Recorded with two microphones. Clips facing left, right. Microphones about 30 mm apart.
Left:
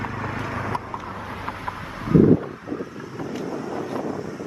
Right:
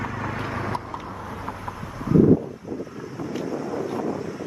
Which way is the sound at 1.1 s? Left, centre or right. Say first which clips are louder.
Left 2 dB; left.